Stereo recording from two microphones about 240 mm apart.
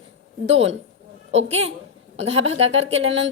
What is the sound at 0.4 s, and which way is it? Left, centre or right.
A woman's voice, right.